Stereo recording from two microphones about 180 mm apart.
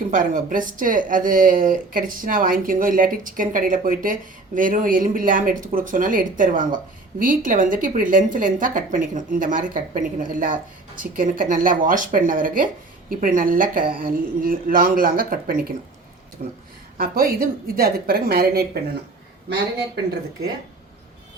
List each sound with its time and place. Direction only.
0.1 s a woman's voice: 50° right (ahead or behind)